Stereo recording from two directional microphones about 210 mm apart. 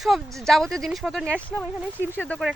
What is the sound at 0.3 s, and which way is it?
Speech, centre (ahead or behind).